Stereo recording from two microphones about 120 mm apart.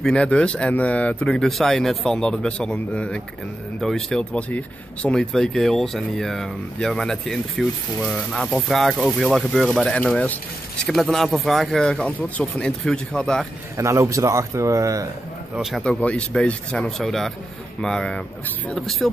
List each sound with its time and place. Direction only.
0.0 s speech: 10° left (ahead or behind)
10.9 s speech: centre (ahead or behind)
13.7 s speech: 25° right (ahead or behind)
15.5 s speech: 5° right (ahead or behind)
15.8 s speech: 10° left (ahead or behind)